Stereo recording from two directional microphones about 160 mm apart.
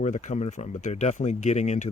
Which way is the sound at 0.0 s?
45° left (ahead or behind).